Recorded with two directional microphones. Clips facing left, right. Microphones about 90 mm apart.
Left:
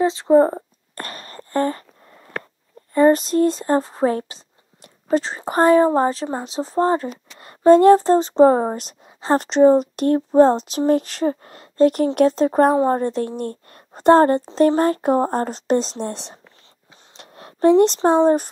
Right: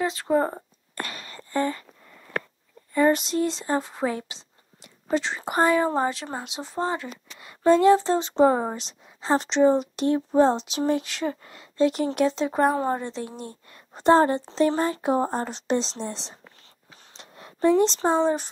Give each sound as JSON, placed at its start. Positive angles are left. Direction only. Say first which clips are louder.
{"t": 0.0, "sound": "speech", "louder": "left 9 dB", "side_deg": 25}
{"t": 0.9, "sound": "wail", "louder": "left 2 dB", "side_deg": 45}
{"t": 2.9, "sound": "speech", "louder": "left 6 dB", "side_deg": 40}
{"t": 8.7, "sound": "speech", "louder": "left 6 dB", "side_deg": 50}